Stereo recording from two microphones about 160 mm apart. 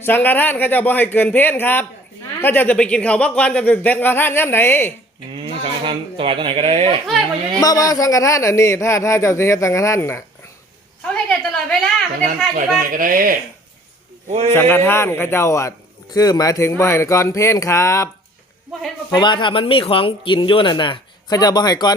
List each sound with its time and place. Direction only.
0.0 s speech: 10° left (ahead or behind)
5.3 s speech: 35° right (ahead or behind)
7.6 s speech: 25° left (ahead or behind)
11.1 s a sound: 5° left (ahead or behind)
12.9 s speech: 60° right (ahead or behind)
14.3 s speech: 40° right (ahead or behind)
14.5 s speech: 15° left (ahead or behind)
19.1 s speech: 30° left (ahead or behind)